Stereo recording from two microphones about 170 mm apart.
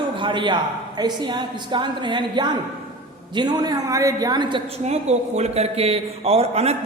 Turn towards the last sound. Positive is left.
turn(degrees=-40)  # may be behind; listen again after turning